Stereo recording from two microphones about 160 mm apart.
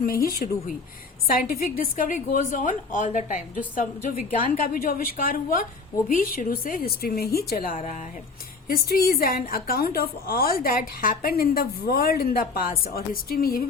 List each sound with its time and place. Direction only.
0.0 s a woman's voice: 65° left (ahead or behind)
8.6 s a woman's voice: 65° left (ahead or behind)